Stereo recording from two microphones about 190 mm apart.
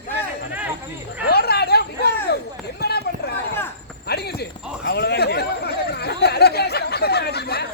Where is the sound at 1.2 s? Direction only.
55° left (ahead or behind).